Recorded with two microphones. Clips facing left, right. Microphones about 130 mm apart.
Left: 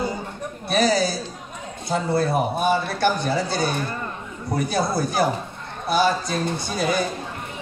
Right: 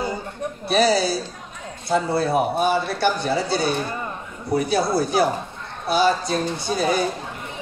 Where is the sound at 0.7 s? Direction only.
50° left (ahead or behind).